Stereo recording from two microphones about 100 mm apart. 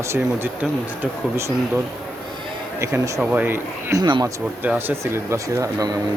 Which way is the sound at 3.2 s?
20° right (ahead or behind).